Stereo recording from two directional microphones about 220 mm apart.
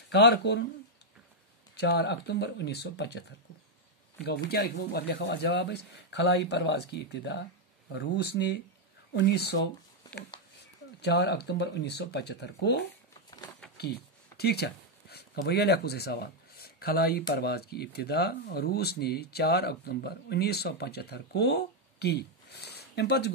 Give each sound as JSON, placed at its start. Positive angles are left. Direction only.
{"t": 0.1, "sound": "speech", "side_deg": 50}
{"t": 1.8, "sound": "speech", "side_deg": 50}
{"t": 11.0, "sound": "speech", "side_deg": 50}
{"t": 13.7, "sound": "a sound", "side_deg": 45}
{"t": 17.3, "sound": "speech", "side_deg": 45}